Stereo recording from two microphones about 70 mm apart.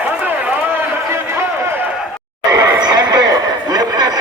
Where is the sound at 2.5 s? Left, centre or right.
Right.